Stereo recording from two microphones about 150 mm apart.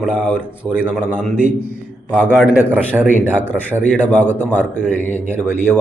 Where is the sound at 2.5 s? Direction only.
15° left (ahead or behind).